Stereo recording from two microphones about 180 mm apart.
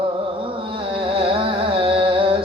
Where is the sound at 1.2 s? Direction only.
30° right (ahead or behind).